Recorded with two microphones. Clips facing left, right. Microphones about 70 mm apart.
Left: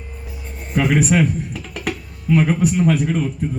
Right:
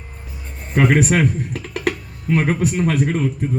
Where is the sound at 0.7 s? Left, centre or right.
Right.